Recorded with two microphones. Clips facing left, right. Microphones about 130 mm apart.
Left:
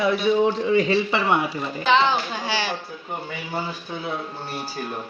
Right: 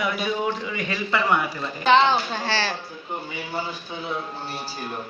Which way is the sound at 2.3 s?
10° left (ahead or behind).